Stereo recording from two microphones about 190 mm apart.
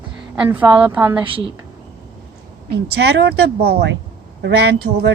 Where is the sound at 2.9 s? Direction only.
60° right (ahead or behind).